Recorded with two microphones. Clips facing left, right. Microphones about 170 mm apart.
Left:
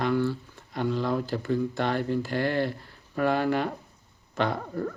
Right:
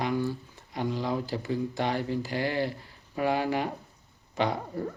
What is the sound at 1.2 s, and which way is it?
Speech, 55° left (ahead or behind).